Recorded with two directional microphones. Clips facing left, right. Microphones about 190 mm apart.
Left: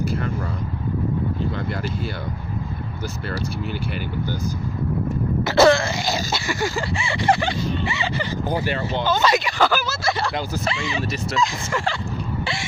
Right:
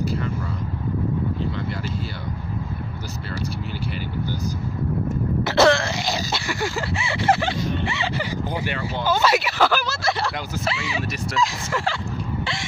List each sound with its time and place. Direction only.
0.0 s speech: 50° left (ahead or behind)
5.4 s throat clearing: centre (ahead or behind)
6.3 s speech: centre (ahead or behind)
8.5 s speech: 40° left (ahead or behind)
9.0 s speech: 10° right (ahead or behind)